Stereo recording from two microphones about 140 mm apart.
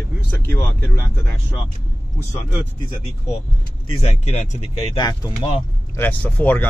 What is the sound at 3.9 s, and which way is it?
Speech, 45° left (ahead or behind).